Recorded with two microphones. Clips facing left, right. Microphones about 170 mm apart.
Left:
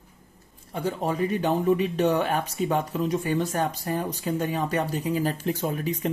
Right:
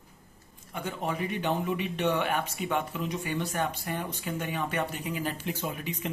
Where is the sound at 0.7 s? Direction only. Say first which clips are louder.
Left 6 dB; 35° left (ahead or behind).